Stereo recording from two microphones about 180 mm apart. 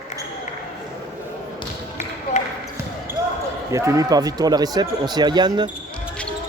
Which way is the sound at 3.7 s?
15° right (ahead or behind).